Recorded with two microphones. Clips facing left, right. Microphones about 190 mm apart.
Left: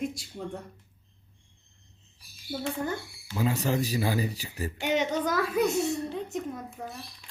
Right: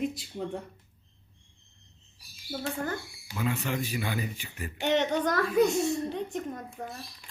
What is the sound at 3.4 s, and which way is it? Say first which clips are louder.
A man's voice: left 4 dB; 35° left (ahead or behind).